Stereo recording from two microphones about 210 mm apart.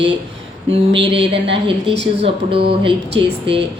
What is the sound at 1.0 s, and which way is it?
Speech, 55° right (ahead or behind).